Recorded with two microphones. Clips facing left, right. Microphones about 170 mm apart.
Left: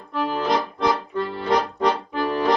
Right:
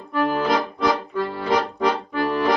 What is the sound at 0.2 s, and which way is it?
Accordion, 5° right (ahead or behind).